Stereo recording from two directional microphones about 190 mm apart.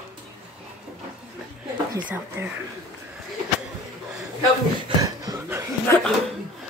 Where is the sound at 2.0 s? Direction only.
10° right (ahead or behind).